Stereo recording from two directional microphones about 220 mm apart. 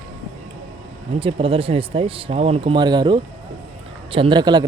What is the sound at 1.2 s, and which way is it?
Speech, 25° right (ahead or behind).